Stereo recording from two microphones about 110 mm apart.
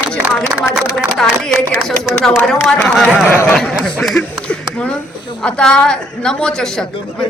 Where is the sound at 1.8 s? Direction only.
Centre (ahead or behind).